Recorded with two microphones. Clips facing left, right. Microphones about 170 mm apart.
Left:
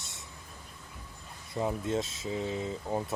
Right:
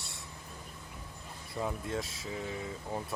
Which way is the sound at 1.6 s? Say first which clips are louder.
Left 5 dB; 20° left (ahead or behind).